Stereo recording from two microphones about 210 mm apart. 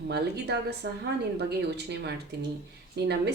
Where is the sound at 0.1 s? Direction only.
50° right (ahead or behind).